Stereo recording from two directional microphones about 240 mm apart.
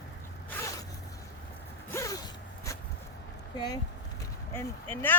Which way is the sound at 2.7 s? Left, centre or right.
Centre.